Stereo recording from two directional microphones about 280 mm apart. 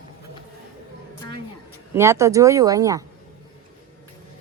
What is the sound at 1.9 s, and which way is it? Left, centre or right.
Speech, centre.